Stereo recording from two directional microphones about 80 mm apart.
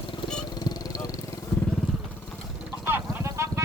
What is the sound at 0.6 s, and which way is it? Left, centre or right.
Vehicle, left.